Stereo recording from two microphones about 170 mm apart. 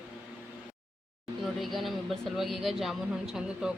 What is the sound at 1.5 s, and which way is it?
Speech, centre (ahead or behind).